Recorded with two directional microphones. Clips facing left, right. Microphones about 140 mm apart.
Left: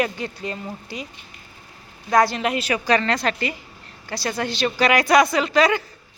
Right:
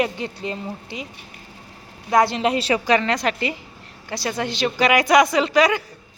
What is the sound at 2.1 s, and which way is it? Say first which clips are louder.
A woman's voice: right 1 dB; 25° right (ahead or behind).